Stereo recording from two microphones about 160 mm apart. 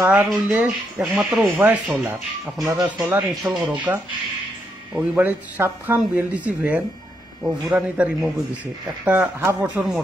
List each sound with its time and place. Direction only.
0.0 s speech: 10° right (ahead or behind)
2.6 s speech: 25° right (ahead or behind)
3.0 s speech: 10° right (ahead or behind)